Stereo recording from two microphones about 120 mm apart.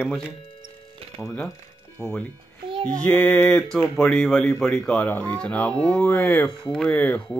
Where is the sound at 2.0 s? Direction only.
15° left (ahead or behind).